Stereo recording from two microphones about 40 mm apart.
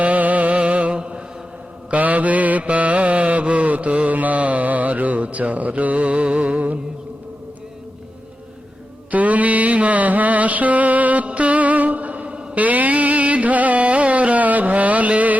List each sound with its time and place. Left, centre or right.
0.0 s a sound: right
0.9 s mantra: right
1.9 s mantra: right
9.1 s mantra: right
12.5 s carnatic music: right